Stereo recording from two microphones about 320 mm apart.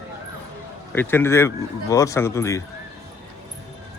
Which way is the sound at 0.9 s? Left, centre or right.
Centre.